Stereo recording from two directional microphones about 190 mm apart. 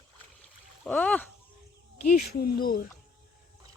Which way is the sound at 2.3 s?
55° left (ahead or behind).